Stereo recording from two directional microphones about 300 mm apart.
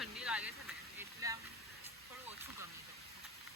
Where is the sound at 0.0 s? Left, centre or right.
Centre.